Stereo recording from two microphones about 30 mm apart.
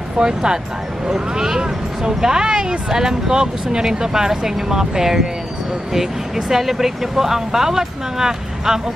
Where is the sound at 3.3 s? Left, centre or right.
Right.